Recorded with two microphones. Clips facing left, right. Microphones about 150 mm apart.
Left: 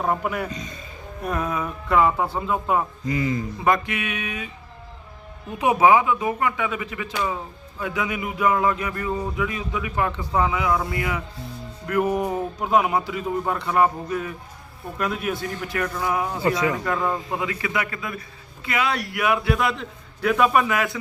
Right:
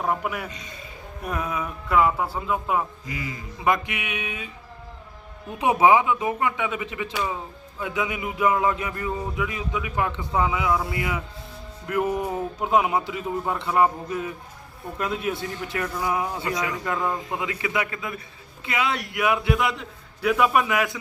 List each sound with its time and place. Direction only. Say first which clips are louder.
0.0 s a man's voice: left 2 dB; 5° right (ahead or behind)
0.5 s a man's voice: left 7 dB; 35° left (ahead or behind)
1.2 s a man's voice: left 3 dB; 5° right (ahead or behind)
3.1 s a man's voice: left 10 dB; 35° left (ahead or behind)
3.6 s a man's voice: even; 15° right (ahead or behind)
5.5 s speech: left 1 dB; 25° right (ahead or behind)
12.0 s music: left 2 dB; 15° left (ahead or behind)
12.6 s speech: left 1 dB; 20° right (ahead or behind)
16.4 s speech: left 6 dB; 30° left (ahead or behind)
16.8 s a man's voice: left 2 dB; 15° right (ahead or behind)